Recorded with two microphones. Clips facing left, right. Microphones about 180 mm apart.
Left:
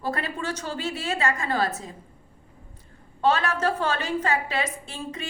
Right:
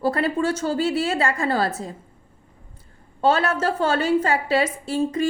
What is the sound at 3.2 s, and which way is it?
A woman's voice, 30° right (ahead or behind).